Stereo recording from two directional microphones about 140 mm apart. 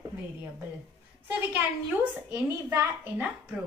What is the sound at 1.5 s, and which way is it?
A woman's voice, 10° right (ahead or behind).